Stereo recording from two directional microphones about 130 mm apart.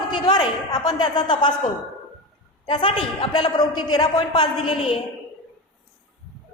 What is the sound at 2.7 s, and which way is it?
A man's voice, 45° left (ahead or behind).